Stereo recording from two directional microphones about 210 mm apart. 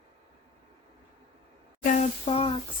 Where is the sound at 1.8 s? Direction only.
40° left (ahead or behind).